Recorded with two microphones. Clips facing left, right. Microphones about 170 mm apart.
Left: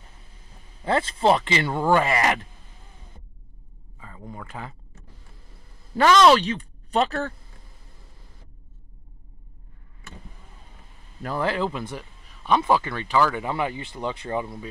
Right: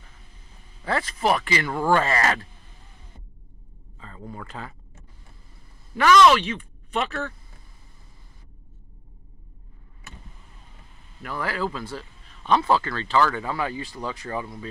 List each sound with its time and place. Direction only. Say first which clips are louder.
0.8 s speech: left 3 dB; 25° left (ahead or behind)
4.0 s speech: right 1 dB; 15° left (ahead or behind)
5.9 s a woman's voice: left 1 dB; 30° left (ahead or behind)
11.2 s speech: left 3 dB; 25° left (ahead or behind)